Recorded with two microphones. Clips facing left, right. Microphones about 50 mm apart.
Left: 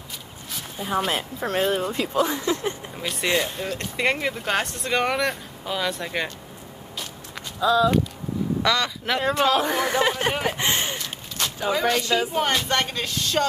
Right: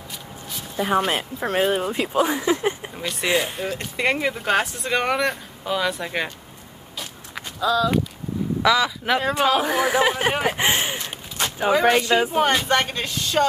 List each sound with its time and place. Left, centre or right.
0.9 s speech: centre
7.0 s walk: centre
8.6 s speech: centre; by 12.4 s right
12.4 s speech: centre